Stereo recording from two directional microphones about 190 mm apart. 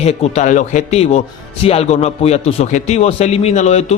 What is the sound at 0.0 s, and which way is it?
A man's voice, 35° left (ahead or behind).